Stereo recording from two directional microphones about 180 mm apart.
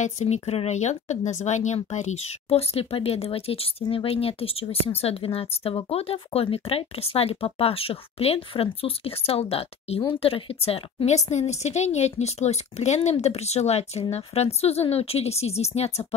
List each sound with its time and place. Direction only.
0.0 s speech: 40° left (ahead or behind)